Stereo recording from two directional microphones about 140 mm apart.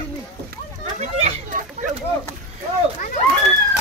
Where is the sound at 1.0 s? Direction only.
55° right (ahead or behind).